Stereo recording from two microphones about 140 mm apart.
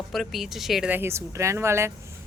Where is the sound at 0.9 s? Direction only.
15° right (ahead or behind).